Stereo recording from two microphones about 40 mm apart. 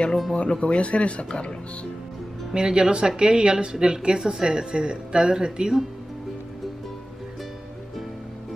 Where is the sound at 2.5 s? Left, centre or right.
Centre.